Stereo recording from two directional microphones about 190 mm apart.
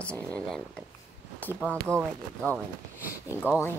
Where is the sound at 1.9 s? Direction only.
15° right (ahead or behind).